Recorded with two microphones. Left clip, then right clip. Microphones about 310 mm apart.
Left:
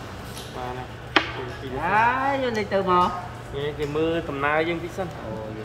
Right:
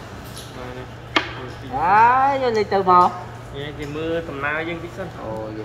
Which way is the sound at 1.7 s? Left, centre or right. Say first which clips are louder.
Right 7 dB; centre.